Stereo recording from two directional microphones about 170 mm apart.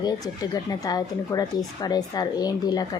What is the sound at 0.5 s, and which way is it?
Speech, 20° left (ahead or behind).